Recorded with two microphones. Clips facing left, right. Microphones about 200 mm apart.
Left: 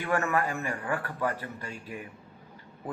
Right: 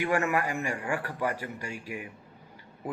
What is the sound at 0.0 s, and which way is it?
Speech, 15° right (ahead or behind).